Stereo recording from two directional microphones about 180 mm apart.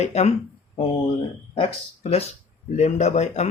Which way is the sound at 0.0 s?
40° left (ahead or behind).